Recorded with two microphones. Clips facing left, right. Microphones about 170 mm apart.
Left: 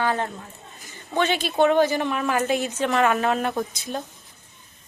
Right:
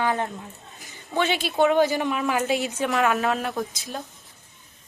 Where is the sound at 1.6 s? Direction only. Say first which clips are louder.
Left 1 dB; 15° right (ahead or behind).